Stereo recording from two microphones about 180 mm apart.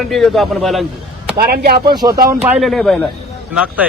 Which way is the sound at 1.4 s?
60° right (ahead or behind).